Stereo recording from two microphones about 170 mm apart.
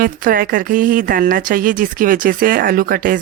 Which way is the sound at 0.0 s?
55° right (ahead or behind).